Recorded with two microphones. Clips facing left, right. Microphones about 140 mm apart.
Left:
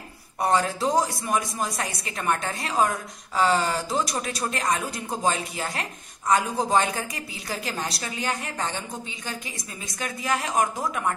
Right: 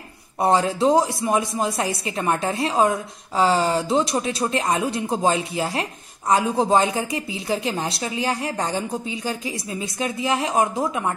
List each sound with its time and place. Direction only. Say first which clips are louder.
0.4 s a woman's voice: right 5 dB; 25° right (ahead or behind)
9.9 s a woman's voice: right 4 dB; 25° right (ahead or behind)